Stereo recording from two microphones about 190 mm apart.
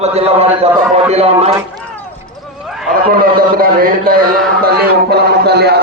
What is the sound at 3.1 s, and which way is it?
A man's voice, 50° right (ahead or behind).